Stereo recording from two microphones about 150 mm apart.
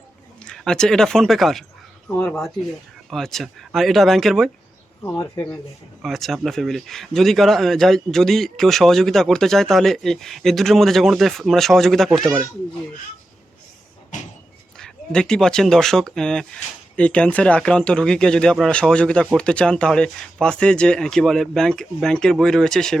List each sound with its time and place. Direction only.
0.4 s speech: 5° left (ahead or behind)
5.2 s speech: 15° left (ahead or behind)
6.0 s speech: centre (ahead or behind)
14.8 s speech: 5° left (ahead or behind)